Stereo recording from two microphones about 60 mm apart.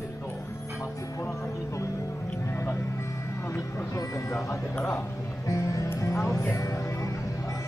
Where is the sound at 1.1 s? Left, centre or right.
Left.